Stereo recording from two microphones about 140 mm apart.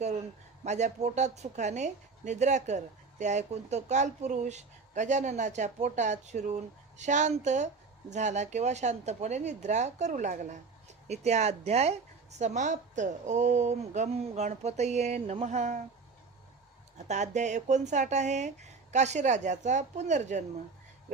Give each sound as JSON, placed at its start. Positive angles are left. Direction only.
{"t": 0.6, "sound": "a woman's voice", "side_deg": -55}
{"t": 17.1, "sound": "a woman's voice", "side_deg": -60}